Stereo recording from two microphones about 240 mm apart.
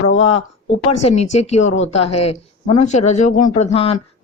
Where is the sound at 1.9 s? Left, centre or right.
Left.